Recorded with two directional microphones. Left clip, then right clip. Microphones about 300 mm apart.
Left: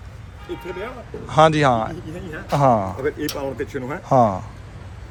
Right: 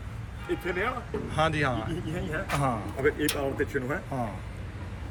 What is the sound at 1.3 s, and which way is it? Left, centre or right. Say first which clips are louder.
A man's voice: left 13 dB; centre.